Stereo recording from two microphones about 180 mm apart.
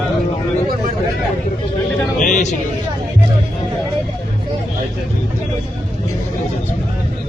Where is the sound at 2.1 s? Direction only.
45° left (ahead or behind).